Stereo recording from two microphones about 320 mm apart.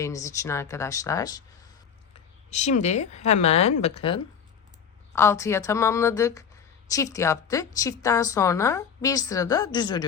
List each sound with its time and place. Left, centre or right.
0.0 s a woman's voice: centre
2.5 s a woman's voice: left